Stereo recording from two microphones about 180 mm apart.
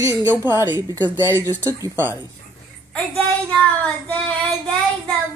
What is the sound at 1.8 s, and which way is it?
Speech, 10° right (ahead or behind).